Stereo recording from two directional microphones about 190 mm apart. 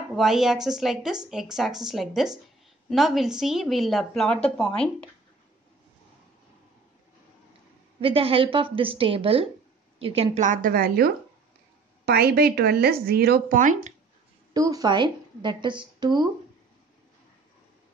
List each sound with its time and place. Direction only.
0.1 s speech: centre (ahead or behind)
8.0 s a woman's voice: 30° right (ahead or behind)
14.5 s a woman's voice: 20° right (ahead or behind)